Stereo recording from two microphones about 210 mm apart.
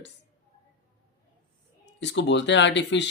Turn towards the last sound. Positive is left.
turn(degrees=55)  # may be behind; listen again after turning